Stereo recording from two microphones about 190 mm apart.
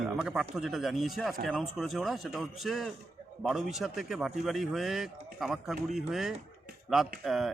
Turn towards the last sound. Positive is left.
turn(degrees=0)  # may be behind; listen again after turning